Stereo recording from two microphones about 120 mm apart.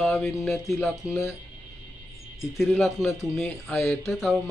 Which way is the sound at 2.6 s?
Centre (ahead or behind).